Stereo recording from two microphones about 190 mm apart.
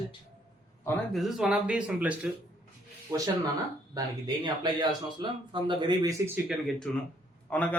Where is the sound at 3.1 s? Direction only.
20° right (ahead or behind).